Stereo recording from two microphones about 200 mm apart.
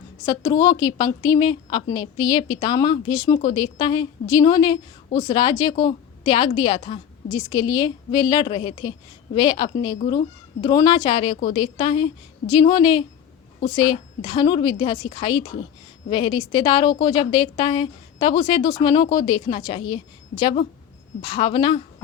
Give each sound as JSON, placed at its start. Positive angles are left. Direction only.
{"t": 0.3, "sound": "a woman's voice", "side_deg": 20}